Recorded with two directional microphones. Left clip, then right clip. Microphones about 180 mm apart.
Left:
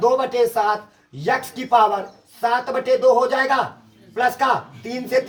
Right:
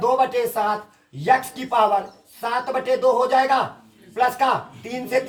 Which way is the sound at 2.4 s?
20° right (ahead or behind).